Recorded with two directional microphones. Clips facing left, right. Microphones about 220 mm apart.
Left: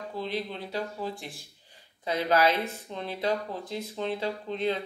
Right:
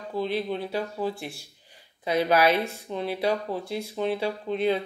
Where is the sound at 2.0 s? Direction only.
15° right (ahead or behind).